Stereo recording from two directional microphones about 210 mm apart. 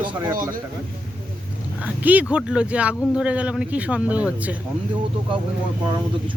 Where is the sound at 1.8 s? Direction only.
5° right (ahead or behind).